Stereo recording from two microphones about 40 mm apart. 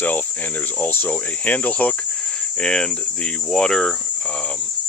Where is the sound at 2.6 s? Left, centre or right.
Left.